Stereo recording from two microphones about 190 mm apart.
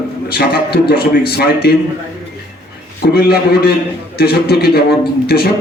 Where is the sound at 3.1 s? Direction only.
55° left (ahead or behind).